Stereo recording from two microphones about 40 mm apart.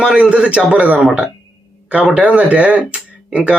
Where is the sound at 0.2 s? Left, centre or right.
Right.